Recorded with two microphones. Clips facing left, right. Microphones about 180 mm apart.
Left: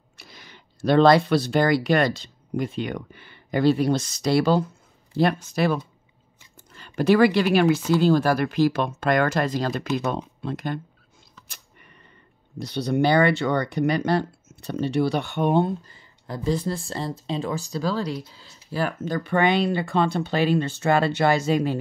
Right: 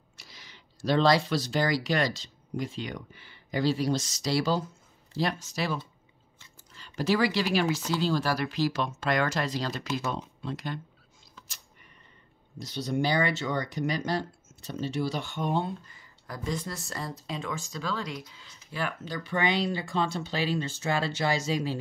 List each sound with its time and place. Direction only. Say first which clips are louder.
0.2 s speech: left 6 dB; 55° left (ahead or behind)
11.4 s a sound: left 4 dB; 60° left (ahead or behind)
12.5 s speech: left 6 dB; 65° left (ahead or behind)
15.9 s speech: left 7 dB; 30° left (ahead or behind); by 21.7 s 55° left (ahead or behind)